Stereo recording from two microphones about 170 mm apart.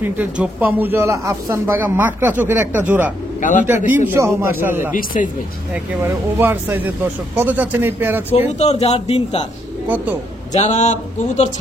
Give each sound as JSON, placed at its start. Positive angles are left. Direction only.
{"t": 0.0, "sound": "speech", "side_deg": -10}
{"t": 3.3, "sound": "a man's voice", "side_deg": 50}
{"t": 3.6, "sound": "speech", "side_deg": -10}
{"t": 4.9, "sound": "speech", "side_deg": 55}
{"t": 6.0, "sound": "speech", "side_deg": -10}
{"t": 8.5, "sound": "speech", "side_deg": 40}
{"t": 10.5, "sound": "speech", "side_deg": 45}